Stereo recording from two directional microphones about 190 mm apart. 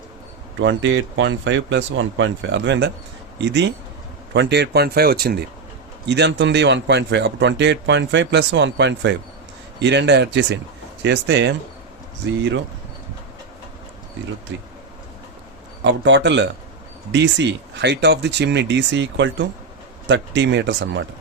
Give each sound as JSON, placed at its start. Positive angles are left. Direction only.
{"t": 0.6, "sound": "a man's voice", "side_deg": -75}
{"t": 15.8, "sound": "a man's voice", "side_deg": -70}